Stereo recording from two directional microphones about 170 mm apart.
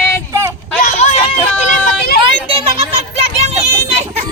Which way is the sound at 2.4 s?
35° right (ahead or behind).